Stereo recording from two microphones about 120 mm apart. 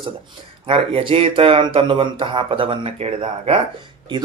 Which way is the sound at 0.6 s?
50° right (ahead or behind).